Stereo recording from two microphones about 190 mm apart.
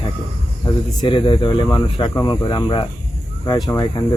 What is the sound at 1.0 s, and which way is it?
Speech, 25° left (ahead or behind).